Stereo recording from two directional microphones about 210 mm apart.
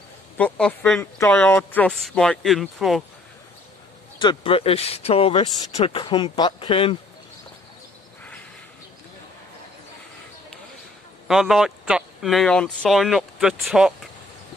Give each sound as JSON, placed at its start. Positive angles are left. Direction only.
{"t": 0.4, "sound": "speech", "side_deg": 5}
{"t": 4.2, "sound": "speech", "side_deg": 25}
{"t": 11.2, "sound": "speech", "side_deg": 0}